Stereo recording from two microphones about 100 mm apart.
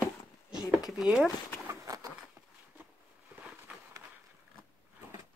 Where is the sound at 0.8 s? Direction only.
5° right (ahead or behind).